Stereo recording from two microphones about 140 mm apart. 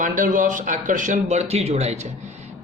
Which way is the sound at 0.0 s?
65° right (ahead or behind).